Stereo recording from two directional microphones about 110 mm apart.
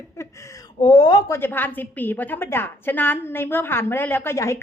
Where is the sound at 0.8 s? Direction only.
45° left (ahead or behind).